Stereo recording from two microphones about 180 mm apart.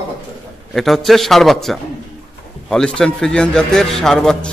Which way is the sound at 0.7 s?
Centre (ahead or behind).